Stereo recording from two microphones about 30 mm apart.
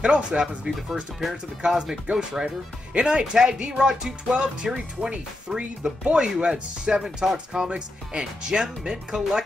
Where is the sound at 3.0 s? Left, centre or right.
Right.